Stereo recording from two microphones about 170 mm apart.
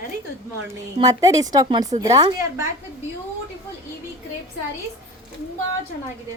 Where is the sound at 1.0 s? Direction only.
20° right (ahead or behind).